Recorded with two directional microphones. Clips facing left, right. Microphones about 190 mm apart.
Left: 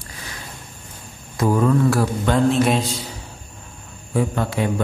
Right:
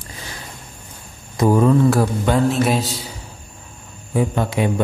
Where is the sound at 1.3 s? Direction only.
20° right (ahead or behind).